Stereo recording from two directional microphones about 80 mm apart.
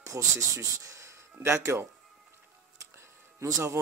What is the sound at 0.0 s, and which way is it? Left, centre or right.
Speech, right.